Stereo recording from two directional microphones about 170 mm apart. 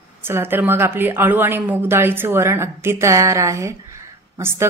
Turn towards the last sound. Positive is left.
turn(degrees=-15)  # may be behind; listen again after turning